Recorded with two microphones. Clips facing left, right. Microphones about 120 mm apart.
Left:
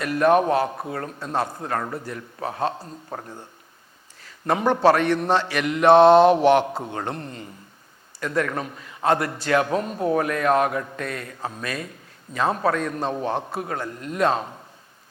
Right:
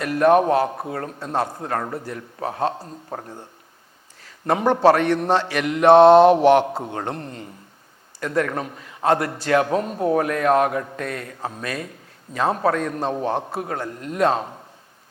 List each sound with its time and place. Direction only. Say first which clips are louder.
0.0 s a man's voice: right 2 dB; 45° right (ahead or behind)
6.7 s a man's voice: right 2 dB; 25° right (ahead or behind)
6.9 s speech: right 1 dB; 40° right (ahead or behind)